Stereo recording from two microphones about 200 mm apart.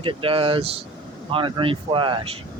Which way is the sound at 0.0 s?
25° right (ahead or behind).